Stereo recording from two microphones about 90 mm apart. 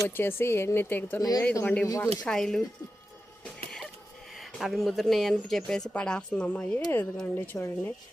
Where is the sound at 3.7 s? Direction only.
5° left (ahead or behind).